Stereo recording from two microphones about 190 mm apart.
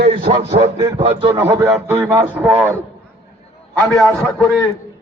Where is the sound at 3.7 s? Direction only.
10° left (ahead or behind).